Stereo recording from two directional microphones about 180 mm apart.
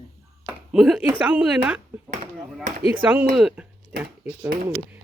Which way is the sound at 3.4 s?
5° right (ahead or behind).